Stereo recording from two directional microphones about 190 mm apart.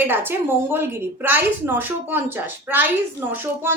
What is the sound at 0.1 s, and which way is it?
A woman's voice, 10° right (ahead or behind).